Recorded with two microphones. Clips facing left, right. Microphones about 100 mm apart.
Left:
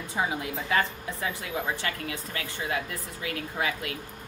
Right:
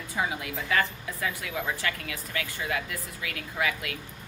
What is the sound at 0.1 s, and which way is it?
A woman's voice, 25° left (ahead or behind).